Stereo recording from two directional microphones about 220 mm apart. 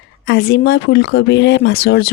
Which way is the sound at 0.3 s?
45° left (ahead or behind).